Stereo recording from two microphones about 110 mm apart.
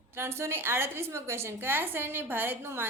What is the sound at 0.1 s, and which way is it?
A woman's voice, 25° right (ahead or behind).